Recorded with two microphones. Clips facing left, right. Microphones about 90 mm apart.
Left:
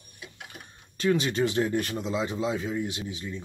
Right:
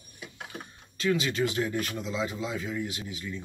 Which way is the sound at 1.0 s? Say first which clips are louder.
Left 2 dB; 30° left (ahead or behind).